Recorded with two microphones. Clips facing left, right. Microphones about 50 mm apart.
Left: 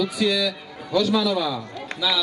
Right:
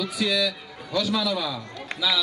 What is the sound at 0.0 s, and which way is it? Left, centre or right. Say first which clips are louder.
A man's voice: left 3 dB; centre.